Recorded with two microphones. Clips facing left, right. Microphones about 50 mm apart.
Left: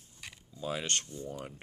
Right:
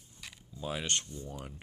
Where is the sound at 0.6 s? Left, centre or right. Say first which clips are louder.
Left 1 dB; right.